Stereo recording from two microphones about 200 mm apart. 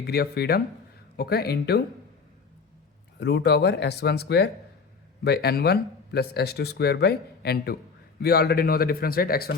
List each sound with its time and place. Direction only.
0.0 s speech: 55° left (ahead or behind)
3.2 s speech: 60° left (ahead or behind)